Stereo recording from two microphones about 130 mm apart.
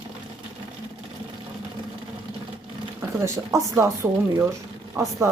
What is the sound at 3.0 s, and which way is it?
Speech, 20° right (ahead or behind).